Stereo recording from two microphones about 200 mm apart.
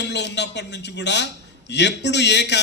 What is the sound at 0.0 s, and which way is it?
A man's voice, 60° left (ahead or behind).